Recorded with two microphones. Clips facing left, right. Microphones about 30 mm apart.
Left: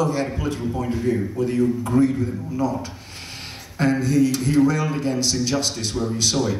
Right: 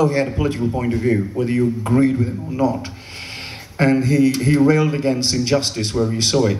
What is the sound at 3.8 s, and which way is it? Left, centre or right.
Speech, right.